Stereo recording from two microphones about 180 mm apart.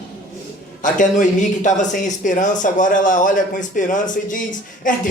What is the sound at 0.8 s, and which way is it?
Speech, 45° left (ahead or behind).